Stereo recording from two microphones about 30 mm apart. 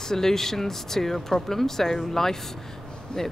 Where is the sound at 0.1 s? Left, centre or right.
Centre.